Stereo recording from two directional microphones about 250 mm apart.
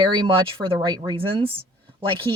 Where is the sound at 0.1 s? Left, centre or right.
Centre.